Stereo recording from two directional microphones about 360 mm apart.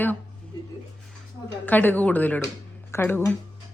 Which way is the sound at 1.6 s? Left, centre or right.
Centre.